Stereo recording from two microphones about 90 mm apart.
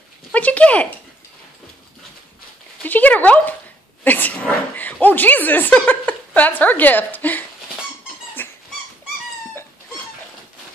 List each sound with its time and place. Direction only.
0.3 s speech: 15° left (ahead or behind)
2.8 s speech: 20° left (ahead or behind)
4.0 s dog: 20° left (ahead or behind)
5.0 s a woman's voice: 20° left (ahead or behind)
8.4 s dog: 25° left (ahead or behind)